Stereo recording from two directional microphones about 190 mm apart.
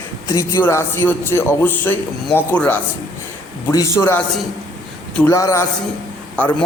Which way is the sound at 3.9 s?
10° left (ahead or behind).